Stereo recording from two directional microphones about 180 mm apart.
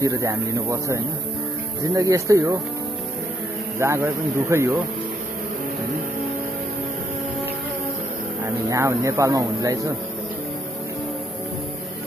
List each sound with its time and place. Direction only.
0.0 s speech: 20° right (ahead or behind)
3.8 s speech: 15° right (ahead or behind)
8.6 s speech: 15° right (ahead or behind)